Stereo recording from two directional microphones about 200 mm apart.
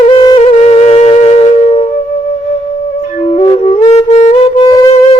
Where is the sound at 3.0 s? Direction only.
35° left (ahead or behind).